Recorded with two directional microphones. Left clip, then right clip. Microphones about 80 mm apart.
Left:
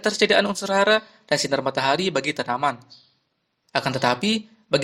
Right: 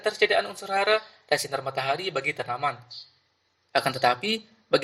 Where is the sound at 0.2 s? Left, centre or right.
Left.